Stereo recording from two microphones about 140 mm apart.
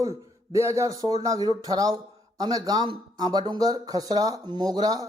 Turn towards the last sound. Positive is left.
turn(degrees=-25)  # may be behind; listen again after turning